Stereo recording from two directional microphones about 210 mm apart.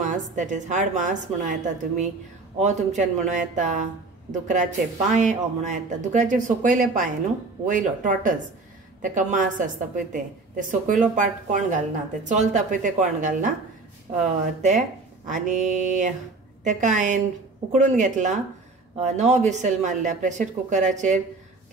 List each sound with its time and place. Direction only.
0.0 s speech: 35° right (ahead or behind)